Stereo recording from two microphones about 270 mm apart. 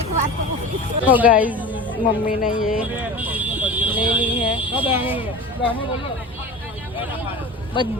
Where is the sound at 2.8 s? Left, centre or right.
Centre.